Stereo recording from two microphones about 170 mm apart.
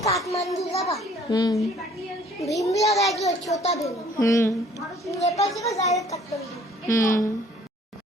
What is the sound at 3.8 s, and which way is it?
Speech, 20° left (ahead or behind).